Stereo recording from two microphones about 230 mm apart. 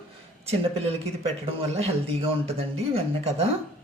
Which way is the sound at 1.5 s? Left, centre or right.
Right.